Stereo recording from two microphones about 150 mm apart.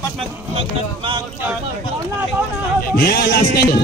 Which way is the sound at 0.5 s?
30° right (ahead or behind).